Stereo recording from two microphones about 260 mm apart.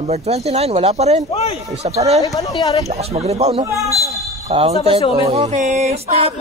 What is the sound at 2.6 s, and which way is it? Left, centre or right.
Speech, centre.